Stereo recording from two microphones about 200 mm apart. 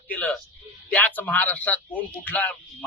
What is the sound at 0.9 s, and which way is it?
Speech, 5° left (ahead or behind).